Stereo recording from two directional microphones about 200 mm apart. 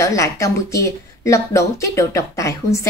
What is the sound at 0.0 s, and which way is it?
A woman's voice, 15° left (ahead or behind).